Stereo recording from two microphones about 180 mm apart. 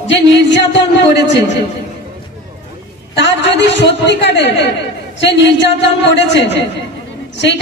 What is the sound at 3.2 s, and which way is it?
Speech, 80° left.